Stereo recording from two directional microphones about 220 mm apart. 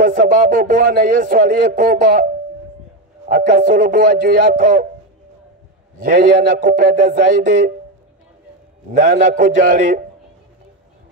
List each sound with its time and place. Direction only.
0.0 s a man's voice: 45° right (ahead or behind)
3.3 s a man's voice: 40° right (ahead or behind)
6.0 s a man's voice: 40° right (ahead or behind)
8.9 s a man's voice: 40° right (ahead or behind)